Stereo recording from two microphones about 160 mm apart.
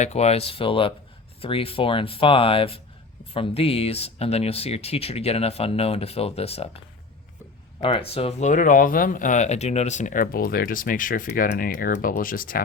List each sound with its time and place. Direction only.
0.0 s speech: 40° left (ahead or behind); by 12.6 s 65° left (ahead or behind)